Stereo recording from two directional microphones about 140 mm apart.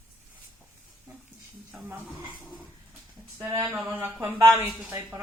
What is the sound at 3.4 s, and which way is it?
A woman's voice, 15° right (ahead or behind).